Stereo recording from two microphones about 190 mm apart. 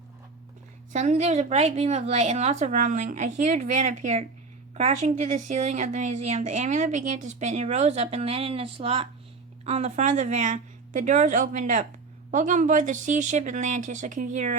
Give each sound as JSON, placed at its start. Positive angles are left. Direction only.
{"t": 0.9, "sound": "a woman's voice", "side_deg": -35}